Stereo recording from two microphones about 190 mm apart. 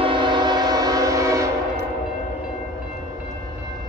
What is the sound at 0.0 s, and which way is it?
Train, 25° right (ahead or behind).